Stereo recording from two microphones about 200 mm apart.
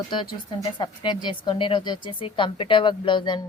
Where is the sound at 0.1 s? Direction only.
25° left (ahead or behind).